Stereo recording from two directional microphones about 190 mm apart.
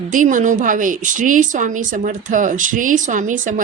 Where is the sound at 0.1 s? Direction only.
45° right (ahead or behind).